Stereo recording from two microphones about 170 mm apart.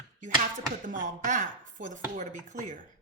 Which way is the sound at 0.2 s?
50° right (ahead or behind).